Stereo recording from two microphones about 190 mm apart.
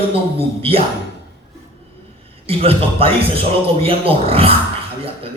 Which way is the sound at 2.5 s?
30° right (ahead or behind).